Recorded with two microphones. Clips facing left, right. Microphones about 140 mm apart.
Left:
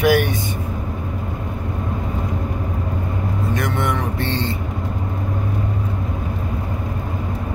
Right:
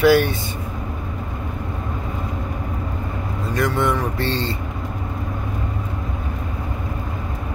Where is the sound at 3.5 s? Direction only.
20° left (ahead or behind).